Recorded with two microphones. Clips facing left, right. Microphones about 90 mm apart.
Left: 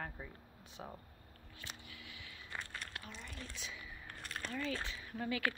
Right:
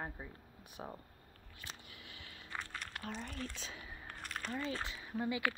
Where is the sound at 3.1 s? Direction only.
50° right (ahead or behind).